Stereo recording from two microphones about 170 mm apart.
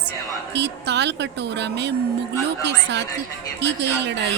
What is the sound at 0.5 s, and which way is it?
A woman's voice, 90° right.